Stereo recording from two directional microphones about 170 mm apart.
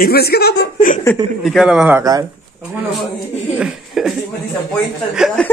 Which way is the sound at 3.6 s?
Centre (ahead or behind).